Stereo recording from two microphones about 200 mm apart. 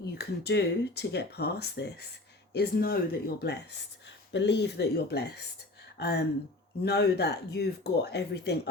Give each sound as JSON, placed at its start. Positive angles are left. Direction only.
{"t": 0.2, "sound": "speech", "side_deg": 55}